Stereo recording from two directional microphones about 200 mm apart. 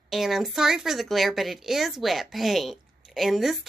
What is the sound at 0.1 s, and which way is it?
A woman's voice, centre (ahead or behind).